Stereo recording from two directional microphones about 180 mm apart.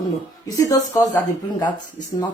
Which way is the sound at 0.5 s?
20° left (ahead or behind).